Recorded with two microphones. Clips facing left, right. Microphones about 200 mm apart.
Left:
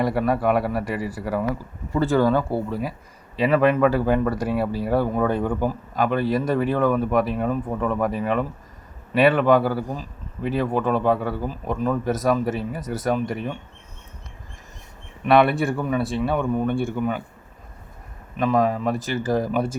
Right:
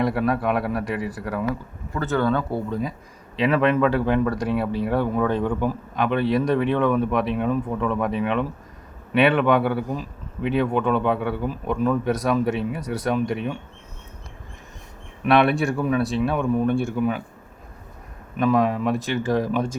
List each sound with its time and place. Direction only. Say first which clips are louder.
0.0 s speech: left 1 dB; centre (ahead or behind)
15.3 s speech: left 1 dB; centre (ahead or behind)
18.3 s speech: right 1 dB; centre (ahead or behind)